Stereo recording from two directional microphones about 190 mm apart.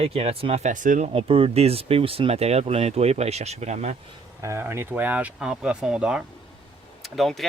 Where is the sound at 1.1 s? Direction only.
30° right (ahead or behind).